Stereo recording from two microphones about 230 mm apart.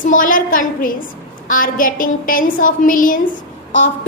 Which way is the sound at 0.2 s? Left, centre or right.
Left.